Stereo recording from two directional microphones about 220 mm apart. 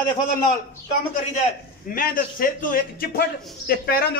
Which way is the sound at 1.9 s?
40° left (ahead or behind).